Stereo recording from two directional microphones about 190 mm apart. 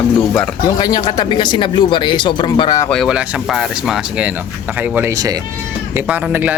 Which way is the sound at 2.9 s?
Centre (ahead or behind).